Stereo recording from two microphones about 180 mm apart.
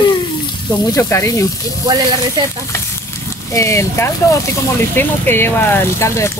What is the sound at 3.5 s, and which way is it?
Speech, 15° left (ahead or behind).